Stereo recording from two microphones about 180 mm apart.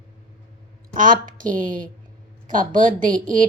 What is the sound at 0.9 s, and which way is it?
Speech, 50° right (ahead or behind).